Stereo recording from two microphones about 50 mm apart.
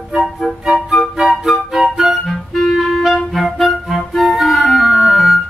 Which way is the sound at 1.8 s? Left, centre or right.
Centre.